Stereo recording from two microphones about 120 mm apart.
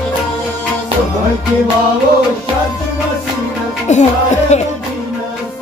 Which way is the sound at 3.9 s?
75° left (ahead or behind).